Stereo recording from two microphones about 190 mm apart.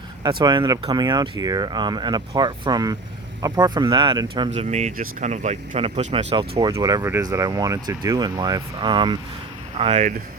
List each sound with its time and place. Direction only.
0.2 s speech: 20° right (ahead or behind)
4.5 s speech: 35° right (ahead or behind)
6.5 s speech: 20° right (ahead or behind)